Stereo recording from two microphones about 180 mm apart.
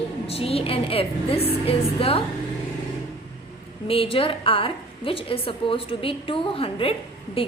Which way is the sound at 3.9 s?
30° left (ahead or behind).